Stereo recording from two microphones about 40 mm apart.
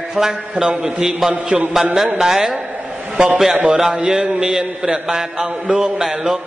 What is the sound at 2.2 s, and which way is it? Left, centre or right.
Speech, centre.